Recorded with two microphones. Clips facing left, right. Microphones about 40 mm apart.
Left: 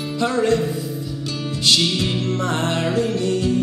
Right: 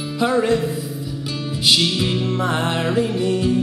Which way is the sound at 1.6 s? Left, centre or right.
Centre.